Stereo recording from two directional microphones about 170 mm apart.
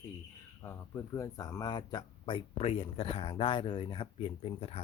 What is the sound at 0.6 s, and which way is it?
Speech, 15° left (ahead or behind).